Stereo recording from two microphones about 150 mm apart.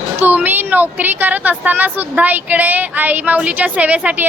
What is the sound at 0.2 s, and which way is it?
Speech, 10° right (ahead or behind).